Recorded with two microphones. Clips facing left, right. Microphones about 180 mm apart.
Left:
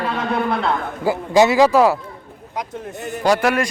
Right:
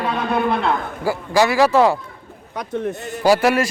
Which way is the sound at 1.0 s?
20° left (ahead or behind).